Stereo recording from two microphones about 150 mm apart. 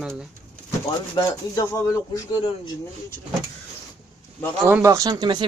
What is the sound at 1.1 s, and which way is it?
Speech, 25° left (ahead or behind).